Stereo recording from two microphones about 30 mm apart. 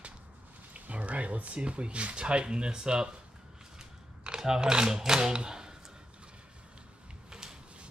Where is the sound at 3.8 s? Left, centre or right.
Right.